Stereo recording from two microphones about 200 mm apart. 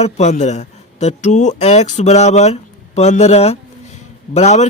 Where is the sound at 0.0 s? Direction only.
35° left (ahead or behind).